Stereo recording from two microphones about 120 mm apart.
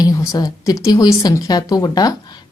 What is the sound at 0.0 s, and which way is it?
A woman's voice, 30° left (ahead or behind).